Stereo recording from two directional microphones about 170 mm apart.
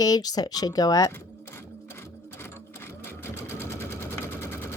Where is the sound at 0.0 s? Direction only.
20° left (ahead or behind).